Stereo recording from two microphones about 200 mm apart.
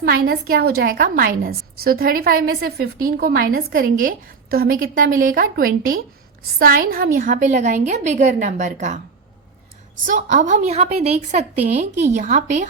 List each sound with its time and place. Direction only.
0.1 s a woman's voice: 50° right (ahead or behind)
10.1 s a woman's voice: 40° right (ahead or behind)